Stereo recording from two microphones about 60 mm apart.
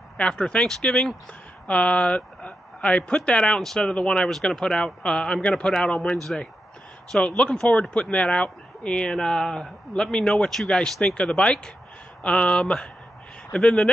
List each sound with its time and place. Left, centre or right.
0.2 s speech: centre
1.7 s speech: centre